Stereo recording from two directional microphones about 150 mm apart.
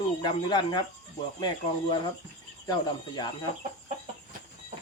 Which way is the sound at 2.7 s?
25° left (ahead or behind).